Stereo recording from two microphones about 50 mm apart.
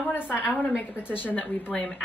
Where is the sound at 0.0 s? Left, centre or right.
Left.